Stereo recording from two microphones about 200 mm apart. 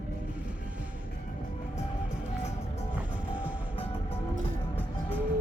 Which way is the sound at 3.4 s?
5° right (ahead or behind).